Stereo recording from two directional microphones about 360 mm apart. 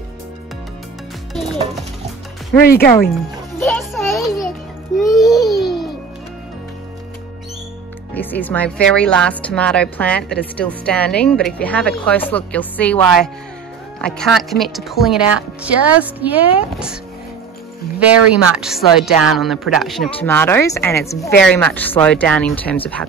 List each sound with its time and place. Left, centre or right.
2.6 s speech: left
3.5 s a sound: centre
5.0 s babbling: centre
8.1 s speech: centre
17.9 s speech: centre